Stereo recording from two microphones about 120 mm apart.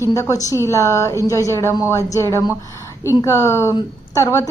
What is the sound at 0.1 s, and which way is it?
A woman's voice, 30° left (ahead or behind).